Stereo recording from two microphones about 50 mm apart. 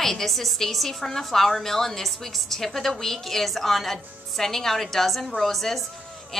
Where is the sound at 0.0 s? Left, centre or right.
Centre.